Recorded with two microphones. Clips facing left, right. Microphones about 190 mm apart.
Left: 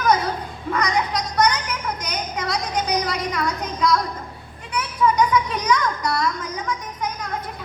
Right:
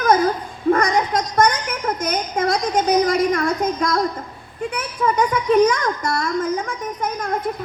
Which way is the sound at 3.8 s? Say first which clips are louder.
Right 1 dB; 50° right (ahead or behind).